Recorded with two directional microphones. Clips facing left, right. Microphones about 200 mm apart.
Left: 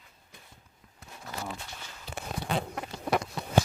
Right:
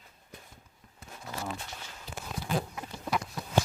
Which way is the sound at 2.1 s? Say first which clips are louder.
Left 1 dB; 65° left (ahead or behind).